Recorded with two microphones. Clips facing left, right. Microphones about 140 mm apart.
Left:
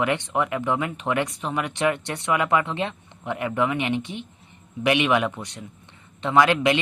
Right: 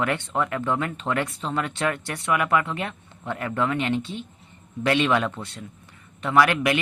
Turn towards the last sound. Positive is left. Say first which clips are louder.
# left 1 dB
turn(degrees=20)  # may be behind; listen again after turning